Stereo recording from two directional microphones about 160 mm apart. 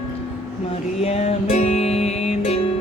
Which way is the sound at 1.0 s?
40° left (ahead or behind).